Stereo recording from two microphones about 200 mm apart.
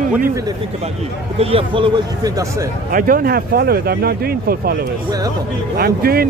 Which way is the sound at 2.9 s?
45° right (ahead or behind).